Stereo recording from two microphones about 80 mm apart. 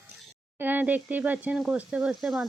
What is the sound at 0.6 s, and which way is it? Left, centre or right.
Speech, right.